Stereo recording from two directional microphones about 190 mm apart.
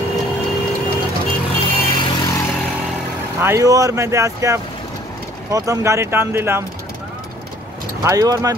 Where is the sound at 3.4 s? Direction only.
15° right (ahead or behind).